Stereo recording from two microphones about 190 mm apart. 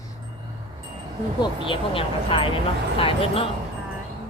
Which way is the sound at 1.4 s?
25° left (ahead or behind).